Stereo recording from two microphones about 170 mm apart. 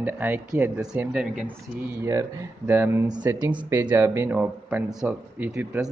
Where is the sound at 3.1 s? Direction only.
25° right (ahead or behind).